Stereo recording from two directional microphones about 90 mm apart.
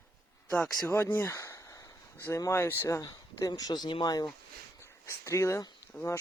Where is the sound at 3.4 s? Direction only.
45° left (ahead or behind).